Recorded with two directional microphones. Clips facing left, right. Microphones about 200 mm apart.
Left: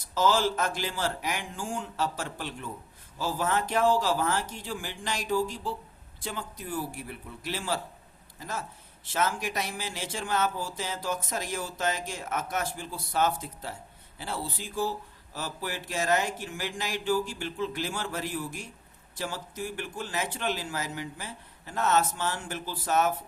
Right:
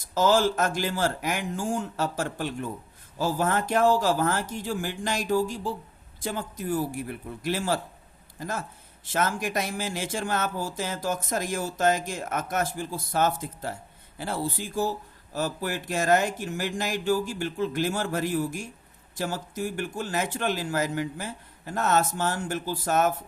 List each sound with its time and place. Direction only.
0.1 s speech: 50° right (ahead or behind)